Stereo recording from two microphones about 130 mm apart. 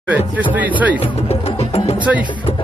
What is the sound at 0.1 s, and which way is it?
Speech, 10° right (ahead or behind).